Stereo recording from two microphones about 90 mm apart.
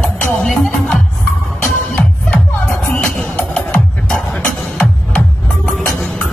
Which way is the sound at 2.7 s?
5° left (ahead or behind).